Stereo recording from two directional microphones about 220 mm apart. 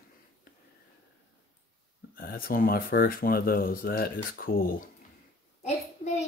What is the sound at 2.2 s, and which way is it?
Speech, 40° left (ahead or behind).